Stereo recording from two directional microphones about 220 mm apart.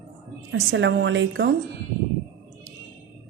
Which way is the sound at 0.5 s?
50° right (ahead or behind).